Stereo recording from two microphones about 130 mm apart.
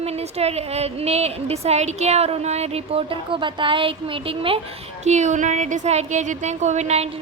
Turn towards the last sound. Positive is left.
turn(degrees=-55)  # may be behind; listen again after turning